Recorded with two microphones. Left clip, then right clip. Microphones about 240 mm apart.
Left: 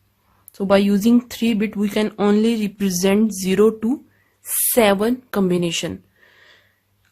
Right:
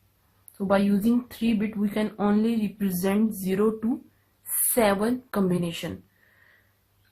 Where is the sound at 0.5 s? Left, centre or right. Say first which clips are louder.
Left 7 dB; left.